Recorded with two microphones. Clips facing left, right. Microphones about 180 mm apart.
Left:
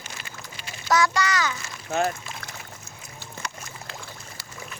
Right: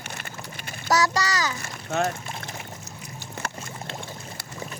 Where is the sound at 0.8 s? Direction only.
40° right (ahead or behind).